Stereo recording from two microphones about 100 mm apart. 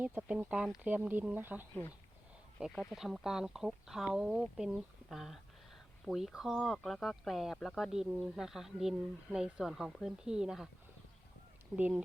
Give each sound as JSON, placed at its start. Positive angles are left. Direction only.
{"t": 0.0, "sound": "speech", "side_deg": -15}
{"t": 2.9, "sound": "speech", "side_deg": -5}
{"t": 11.8, "sound": "speech", "side_deg": -10}